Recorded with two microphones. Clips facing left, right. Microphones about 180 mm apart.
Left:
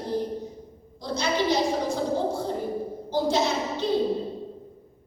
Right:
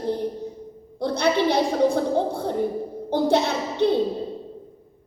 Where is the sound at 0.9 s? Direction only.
60° right (ahead or behind).